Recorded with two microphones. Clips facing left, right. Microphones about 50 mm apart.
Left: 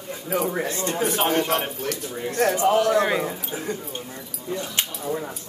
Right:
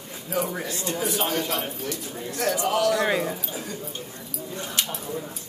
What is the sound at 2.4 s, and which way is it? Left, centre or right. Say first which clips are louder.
Speech: left 4 dB; left.